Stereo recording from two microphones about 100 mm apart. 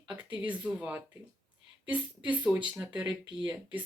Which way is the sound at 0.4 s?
15° right (ahead or behind).